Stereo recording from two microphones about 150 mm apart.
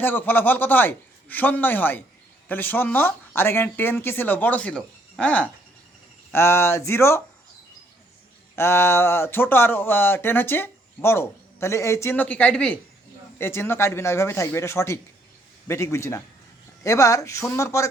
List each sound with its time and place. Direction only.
0.0 s speech: 15° left (ahead or behind)
8.5 s a man's voice: 15° left (ahead or behind)